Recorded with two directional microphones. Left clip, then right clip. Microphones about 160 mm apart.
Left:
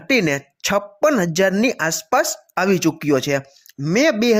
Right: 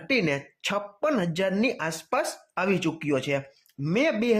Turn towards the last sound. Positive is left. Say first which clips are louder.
# left 8 dB
turn(degrees=40)  # may be behind; listen again after turning